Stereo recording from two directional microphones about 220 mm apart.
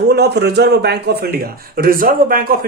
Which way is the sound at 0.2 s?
50° right (ahead or behind).